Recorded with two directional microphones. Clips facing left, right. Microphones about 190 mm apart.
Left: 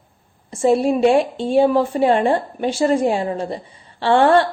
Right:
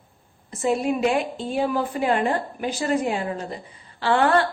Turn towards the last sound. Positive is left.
turn(degrees=30)  # may be behind; listen again after turning